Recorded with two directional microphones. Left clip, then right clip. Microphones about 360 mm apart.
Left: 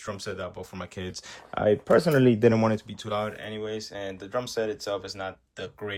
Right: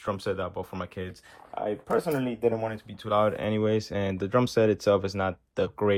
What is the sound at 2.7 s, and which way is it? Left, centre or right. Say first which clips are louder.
Speech: right 1 dB; centre.